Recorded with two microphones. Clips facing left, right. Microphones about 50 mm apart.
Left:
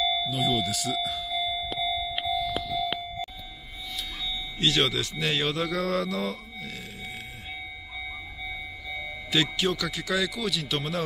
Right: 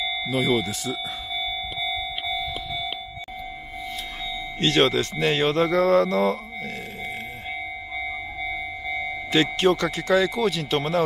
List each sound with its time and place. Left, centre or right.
0.3 s speech: right
4.6 s speech: right
9.3 s speech: right